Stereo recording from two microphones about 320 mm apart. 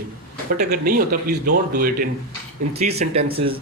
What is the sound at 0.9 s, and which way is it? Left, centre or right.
Speech, right.